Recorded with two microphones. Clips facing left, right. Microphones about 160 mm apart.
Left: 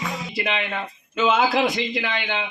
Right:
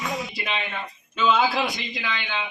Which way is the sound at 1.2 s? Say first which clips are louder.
Left 2 dB; 65° left (ahead or behind).